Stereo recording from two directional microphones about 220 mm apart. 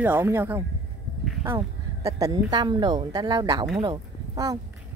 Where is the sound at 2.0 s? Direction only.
15° right (ahead or behind).